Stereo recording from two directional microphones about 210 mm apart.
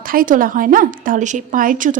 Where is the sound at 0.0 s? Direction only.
40° right (ahead or behind).